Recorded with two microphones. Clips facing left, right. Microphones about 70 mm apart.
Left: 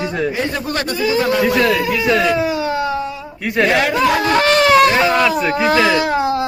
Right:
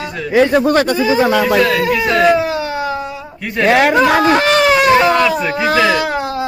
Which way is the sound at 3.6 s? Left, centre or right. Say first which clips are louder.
Right 5 dB; right.